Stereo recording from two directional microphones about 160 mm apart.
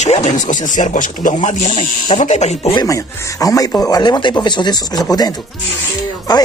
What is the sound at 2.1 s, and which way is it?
Speech, 45° left (ahead or behind).